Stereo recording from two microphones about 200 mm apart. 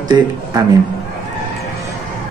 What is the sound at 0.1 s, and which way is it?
Speech, 20° right (ahead or behind).